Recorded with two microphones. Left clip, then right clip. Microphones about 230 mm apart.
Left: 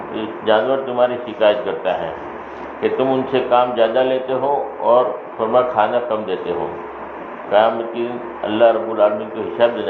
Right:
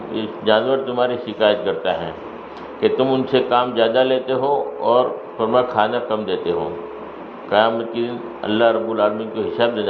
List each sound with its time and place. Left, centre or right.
0.1 s a man's voice: right
7.5 s a man's voice: right